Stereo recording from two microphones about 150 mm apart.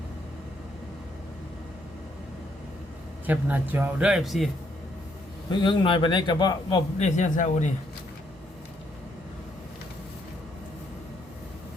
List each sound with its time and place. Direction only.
3.2 s speech: 10° right (ahead or behind)
5.5 s a man's voice: 30° left (ahead or behind)
7.2 s speech: 55° left (ahead or behind)